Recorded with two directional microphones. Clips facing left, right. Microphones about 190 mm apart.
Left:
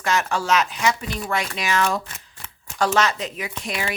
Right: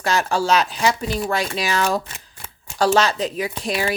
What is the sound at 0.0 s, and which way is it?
Speech, 35° right (ahead or behind).